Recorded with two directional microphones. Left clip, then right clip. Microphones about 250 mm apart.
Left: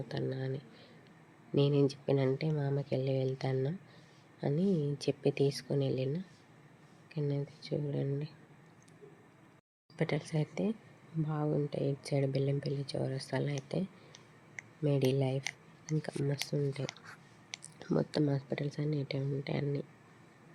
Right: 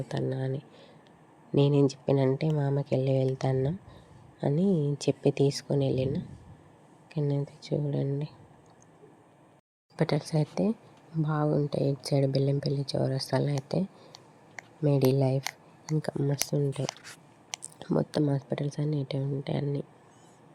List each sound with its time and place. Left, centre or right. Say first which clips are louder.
0.1 s speech: right 5 dB; centre
10.0 s speech: right 6 dB; right